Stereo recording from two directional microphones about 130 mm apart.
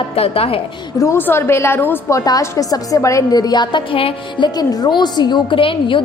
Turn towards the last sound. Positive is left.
turn(degrees=40)  # may be behind; listen again after turning